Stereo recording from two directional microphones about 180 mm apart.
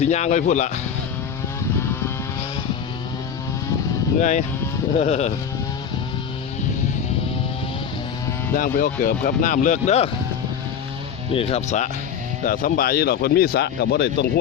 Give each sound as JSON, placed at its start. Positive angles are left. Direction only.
{"t": 0.0, "sound": "speech", "side_deg": 40}
{"t": 4.2, "sound": "speech", "side_deg": 40}
{"t": 8.5, "sound": "speech", "side_deg": 50}
{"t": 11.3, "sound": "speech", "side_deg": 30}
{"t": 12.5, "sound": "speech", "side_deg": 50}